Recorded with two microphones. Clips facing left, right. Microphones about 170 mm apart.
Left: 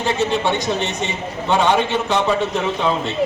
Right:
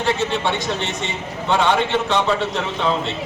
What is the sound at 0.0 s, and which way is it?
A man's voice, 15° left (ahead or behind).